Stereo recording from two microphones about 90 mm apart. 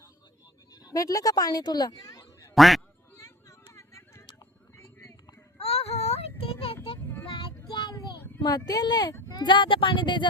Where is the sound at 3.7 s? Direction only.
35° left (ahead or behind).